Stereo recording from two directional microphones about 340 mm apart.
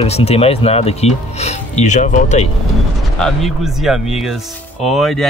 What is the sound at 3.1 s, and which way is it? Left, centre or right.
Speech, centre.